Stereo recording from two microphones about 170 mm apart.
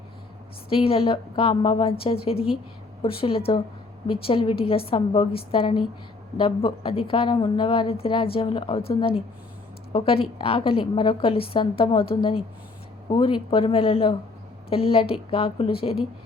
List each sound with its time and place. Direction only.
0.7 s a woman's voice: 35° left (ahead or behind)